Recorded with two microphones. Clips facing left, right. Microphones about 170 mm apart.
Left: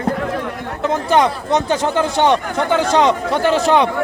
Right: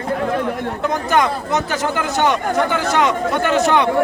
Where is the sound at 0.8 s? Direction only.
25° left (ahead or behind).